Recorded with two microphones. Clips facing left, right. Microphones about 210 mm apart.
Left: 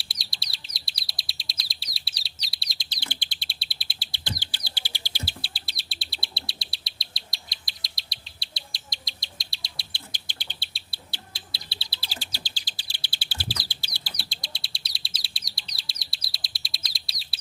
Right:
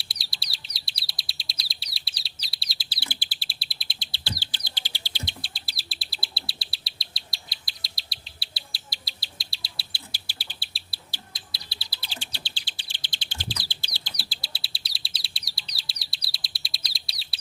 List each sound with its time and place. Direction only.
0.0 s bird: centre (ahead or behind)
0.9 s chirp: centre (ahead or behind)
4.1 s bird: 15° left (ahead or behind)
5.4 s insect: centre (ahead or behind)
11.3 s bird: 25° left (ahead or behind)
12.2 s bird: 40° left (ahead or behind)
13.0 s bird: 10° left (ahead or behind)
14.0 s bird: centre (ahead or behind)